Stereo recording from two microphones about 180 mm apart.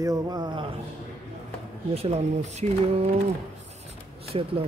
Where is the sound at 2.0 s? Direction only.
35° right (ahead or behind).